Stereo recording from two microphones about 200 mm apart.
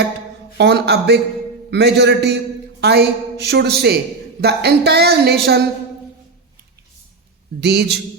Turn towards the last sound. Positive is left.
turn(degrees=-55)  # may be behind; listen again after turning